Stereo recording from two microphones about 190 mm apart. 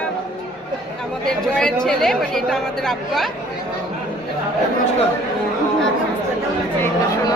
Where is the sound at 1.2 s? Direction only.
5° left (ahead or behind).